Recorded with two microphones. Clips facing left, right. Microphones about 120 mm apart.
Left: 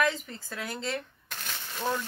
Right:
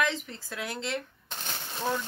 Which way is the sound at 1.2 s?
30° right (ahead or behind).